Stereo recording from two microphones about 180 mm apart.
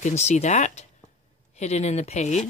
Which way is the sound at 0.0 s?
40° left (ahead or behind).